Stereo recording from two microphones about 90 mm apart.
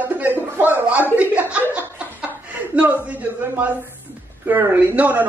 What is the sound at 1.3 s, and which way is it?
Chuckle, 15° right (ahead or behind).